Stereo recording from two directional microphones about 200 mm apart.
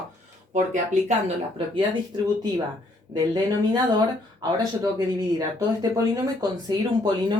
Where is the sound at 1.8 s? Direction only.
20° right (ahead or behind).